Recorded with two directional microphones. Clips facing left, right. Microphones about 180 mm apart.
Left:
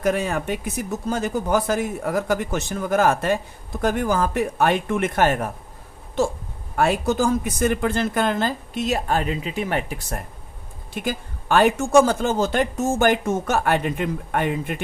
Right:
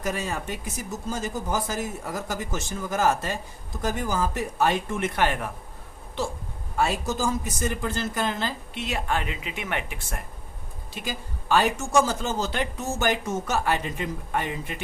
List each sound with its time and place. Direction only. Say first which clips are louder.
0.0 s speech: left 7 dB; 60° left (ahead or behind)
6.7 s speech: left 6 dB; 60° left (ahead or behind); by 10.2 s 40° left (ahead or behind)
10.9 s speech: left 7 dB; 55° left (ahead or behind)